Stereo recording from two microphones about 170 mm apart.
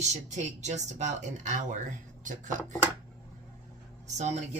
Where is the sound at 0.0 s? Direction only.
45° right (ahead or behind).